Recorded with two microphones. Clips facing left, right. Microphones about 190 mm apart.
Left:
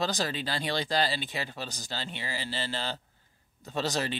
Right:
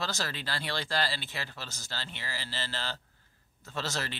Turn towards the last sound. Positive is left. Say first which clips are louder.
# left 5 dB
turn(degrees=15)  # may be behind; listen again after turning